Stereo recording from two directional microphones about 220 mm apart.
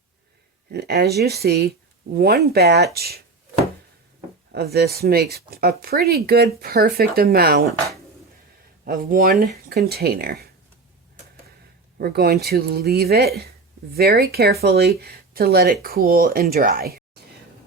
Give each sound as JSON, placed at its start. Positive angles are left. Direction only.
{"t": 0.7, "sound": "speech", "side_deg": -50}
{"t": 4.5, "sound": "speech", "side_deg": -45}
{"t": 8.8, "sound": "speech", "side_deg": -40}
{"t": 11.9, "sound": "speech", "side_deg": -45}